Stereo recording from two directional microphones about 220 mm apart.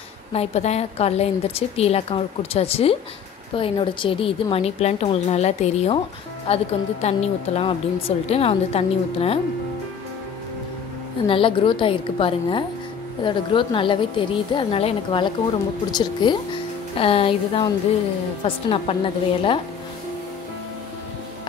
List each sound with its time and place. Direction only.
0.3 s a woman's voice: 30° left (ahead or behind)
11.2 s a woman's voice: 25° left (ahead or behind)
18.7 s a woman's voice: 25° left (ahead or behind)